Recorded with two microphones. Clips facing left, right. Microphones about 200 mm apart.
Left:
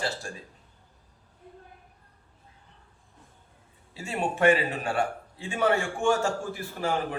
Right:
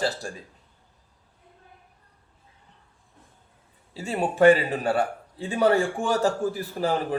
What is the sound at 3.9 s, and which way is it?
A man's voice, 35° right (ahead or behind).